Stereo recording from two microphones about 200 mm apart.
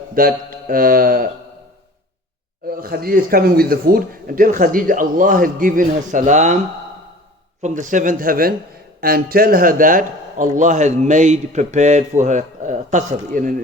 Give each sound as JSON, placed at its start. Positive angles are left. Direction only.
{"t": 0.1, "sound": "speech", "side_deg": -45}
{"t": 2.6, "sound": "speech", "side_deg": -50}
{"t": 7.6, "sound": "a man's voice", "side_deg": -40}